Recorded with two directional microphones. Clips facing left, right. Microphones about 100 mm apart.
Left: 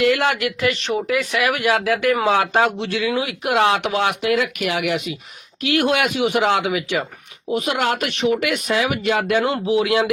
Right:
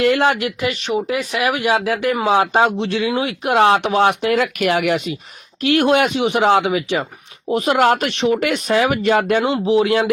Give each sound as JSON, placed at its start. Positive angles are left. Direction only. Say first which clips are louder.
{"t": 0.0, "sound": "speech", "louder": "right 2 dB", "side_deg": -30}
{"t": 5.6, "sound": "speech", "louder": "right 4 dB", "side_deg": -35}